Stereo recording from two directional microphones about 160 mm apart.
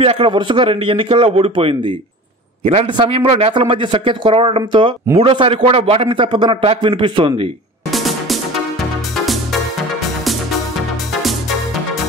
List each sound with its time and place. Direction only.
0.0 s a man's voice: 35° right (ahead or behind)
7.9 s music: centre (ahead or behind)